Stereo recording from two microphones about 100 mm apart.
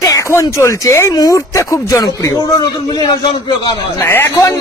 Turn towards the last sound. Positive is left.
turn(degrees=30)  # may be behind; listen again after turning